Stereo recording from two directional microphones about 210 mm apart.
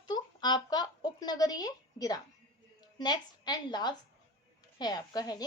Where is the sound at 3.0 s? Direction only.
20° left (ahead or behind).